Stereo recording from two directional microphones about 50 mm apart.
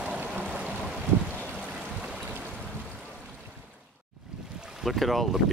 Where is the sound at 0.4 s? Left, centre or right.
Right.